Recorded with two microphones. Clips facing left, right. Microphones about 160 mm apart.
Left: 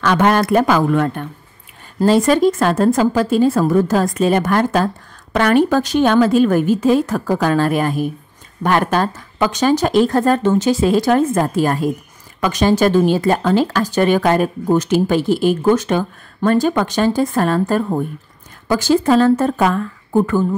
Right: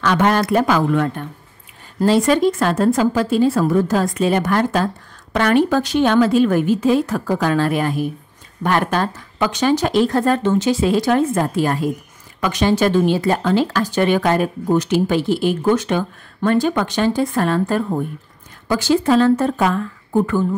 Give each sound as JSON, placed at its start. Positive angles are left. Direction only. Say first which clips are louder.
{"t": 0.0, "sound": "speech", "louder": "left 2 dB", "side_deg": 50}